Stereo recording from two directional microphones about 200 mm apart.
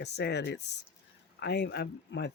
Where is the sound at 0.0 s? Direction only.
55° left (ahead or behind).